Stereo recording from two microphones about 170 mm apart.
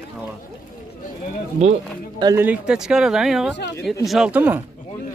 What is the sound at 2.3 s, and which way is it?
Speech, 5° right (ahead or behind).